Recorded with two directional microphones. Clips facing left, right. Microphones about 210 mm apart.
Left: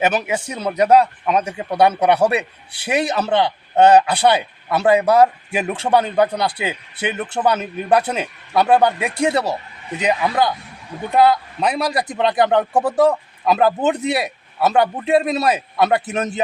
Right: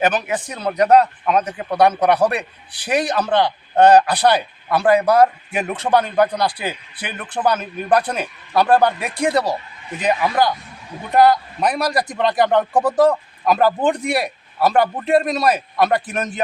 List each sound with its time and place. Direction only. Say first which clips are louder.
0.0 s speech: even; 10° left (ahead or behind)
2.7 s a man's voice: even; 25° left (ahead or behind)